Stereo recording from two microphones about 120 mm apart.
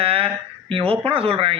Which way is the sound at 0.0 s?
50° right (ahead or behind).